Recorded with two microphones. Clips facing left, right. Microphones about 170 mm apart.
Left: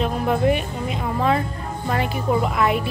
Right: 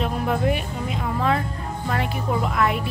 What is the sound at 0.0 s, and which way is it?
Speech, centre (ahead or behind).